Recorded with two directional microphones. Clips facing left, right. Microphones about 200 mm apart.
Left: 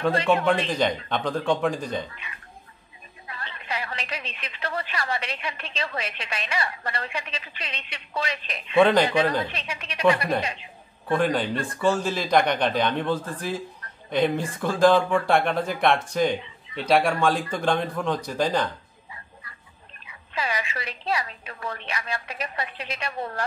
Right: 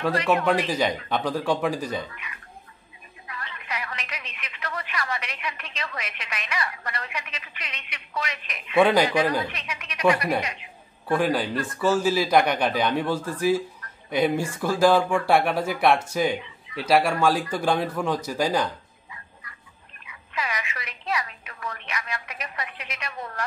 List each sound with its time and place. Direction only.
0.1 s a woman's voice: 30° left (ahead or behind)
0.7 s speech: 5° right (ahead or behind)
3.3 s a woman's voice: 30° left (ahead or behind)
8.7 s speech: 10° right (ahead or behind)
9.5 s a woman's voice: 30° left (ahead or behind)
11.1 s speech: 5° right (ahead or behind)
20.1 s a woman's voice: 30° left (ahead or behind)